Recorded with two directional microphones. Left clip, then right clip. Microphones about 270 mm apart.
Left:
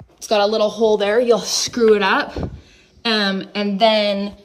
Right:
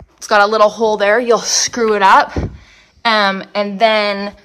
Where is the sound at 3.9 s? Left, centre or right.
Centre.